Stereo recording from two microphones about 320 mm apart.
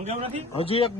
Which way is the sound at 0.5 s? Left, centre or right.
Centre.